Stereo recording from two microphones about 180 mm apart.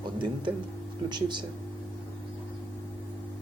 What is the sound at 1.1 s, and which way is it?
Speech, 25° right (ahead or behind).